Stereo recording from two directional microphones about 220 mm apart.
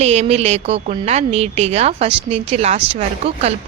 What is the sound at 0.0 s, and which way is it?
A woman's voice, 30° right (ahead or behind).